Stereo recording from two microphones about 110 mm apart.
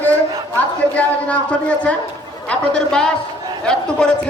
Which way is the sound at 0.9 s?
10° left (ahead or behind).